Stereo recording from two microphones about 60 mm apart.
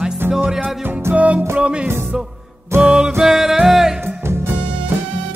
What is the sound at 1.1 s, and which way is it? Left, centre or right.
Music, right.